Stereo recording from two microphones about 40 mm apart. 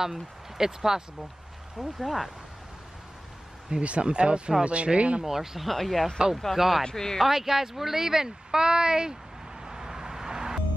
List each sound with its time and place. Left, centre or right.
0.0 s speech: centre
3.8 s speech: right
5.2 s speech: centre
5.7 s speech: centre
6.8 s speech: centre
7.2 s speech: centre
9.7 s vehicle: centre